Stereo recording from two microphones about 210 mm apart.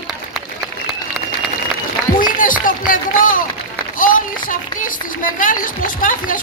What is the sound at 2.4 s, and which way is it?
A woman's voice, 40° left (ahead or behind).